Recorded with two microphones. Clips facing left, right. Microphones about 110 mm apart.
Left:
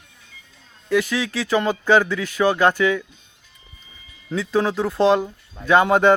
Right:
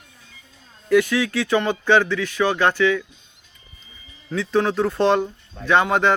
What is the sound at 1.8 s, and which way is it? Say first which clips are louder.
Speech: even; 10° left (ahead or behind).